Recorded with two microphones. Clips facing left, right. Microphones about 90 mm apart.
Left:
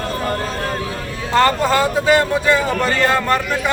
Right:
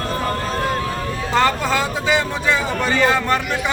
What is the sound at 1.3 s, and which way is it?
A man's voice, centre (ahead or behind).